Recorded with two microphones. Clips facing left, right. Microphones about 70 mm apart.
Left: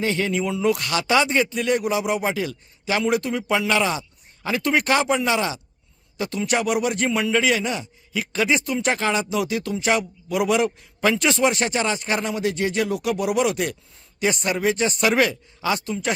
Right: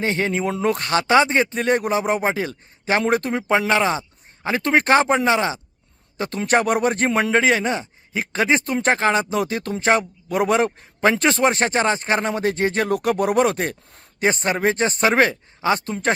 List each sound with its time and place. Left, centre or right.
0.0 s a man's voice: right